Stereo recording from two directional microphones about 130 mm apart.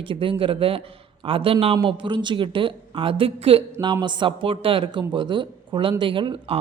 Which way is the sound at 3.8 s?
35° right (ahead or behind).